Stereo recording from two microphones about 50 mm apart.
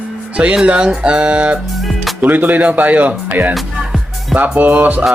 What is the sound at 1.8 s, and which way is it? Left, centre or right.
Music, centre.